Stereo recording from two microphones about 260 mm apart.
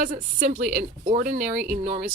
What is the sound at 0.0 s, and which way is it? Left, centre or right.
Speech, right.